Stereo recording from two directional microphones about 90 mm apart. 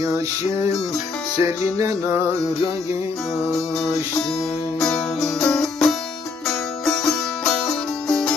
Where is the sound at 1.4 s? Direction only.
35° right (ahead or behind).